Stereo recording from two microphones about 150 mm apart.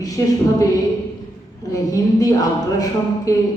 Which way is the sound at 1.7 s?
25° left (ahead or behind).